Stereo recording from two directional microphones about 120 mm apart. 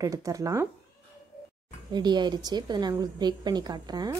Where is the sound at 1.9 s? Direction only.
35° right (ahead or behind).